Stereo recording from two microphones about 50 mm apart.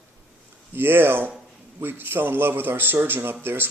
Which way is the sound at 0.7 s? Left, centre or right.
Right.